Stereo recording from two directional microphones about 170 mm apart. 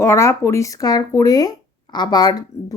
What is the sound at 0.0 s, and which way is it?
Speech, 15° left (ahead or behind).